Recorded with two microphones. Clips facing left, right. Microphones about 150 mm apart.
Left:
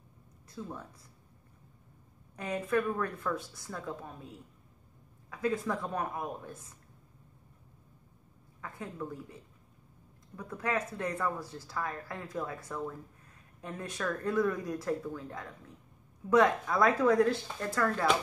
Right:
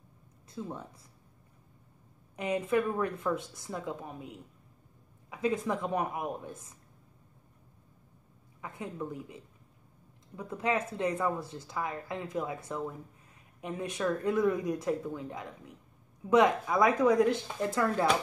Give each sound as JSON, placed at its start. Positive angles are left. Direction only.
{"t": 0.5, "sound": "speech", "side_deg": -20}
{"t": 2.3, "sound": "speech", "side_deg": -20}
{"t": 8.5, "sound": "speech", "side_deg": -20}